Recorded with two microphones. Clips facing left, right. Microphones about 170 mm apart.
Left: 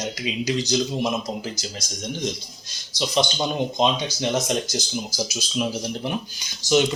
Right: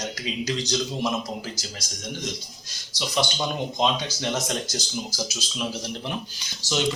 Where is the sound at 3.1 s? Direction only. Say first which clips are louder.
Left 3 dB; 20° left (ahead or behind).